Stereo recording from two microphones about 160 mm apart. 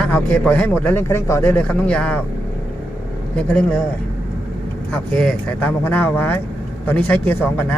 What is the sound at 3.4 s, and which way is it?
Speech, 5° left (ahead or behind).